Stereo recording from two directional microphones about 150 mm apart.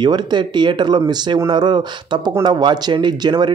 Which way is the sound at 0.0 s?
30° right (ahead or behind).